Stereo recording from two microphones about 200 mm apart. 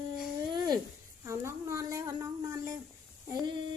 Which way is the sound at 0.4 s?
20° right (ahead or behind).